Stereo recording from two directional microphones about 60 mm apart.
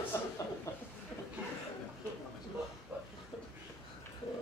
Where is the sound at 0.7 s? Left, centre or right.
Left.